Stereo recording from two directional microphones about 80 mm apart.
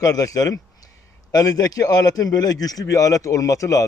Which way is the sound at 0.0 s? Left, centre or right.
Left.